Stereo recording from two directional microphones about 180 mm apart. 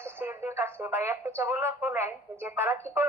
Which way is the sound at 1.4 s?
10° right (ahead or behind).